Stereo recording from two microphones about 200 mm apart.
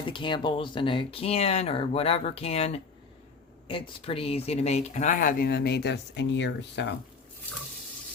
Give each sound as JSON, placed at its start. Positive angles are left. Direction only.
{"t": 0.0, "sound": "speech", "side_deg": 25}